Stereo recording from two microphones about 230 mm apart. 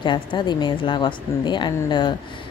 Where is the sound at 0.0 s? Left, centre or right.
Centre.